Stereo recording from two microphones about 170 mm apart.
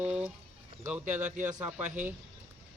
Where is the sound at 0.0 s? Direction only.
5° right (ahead or behind).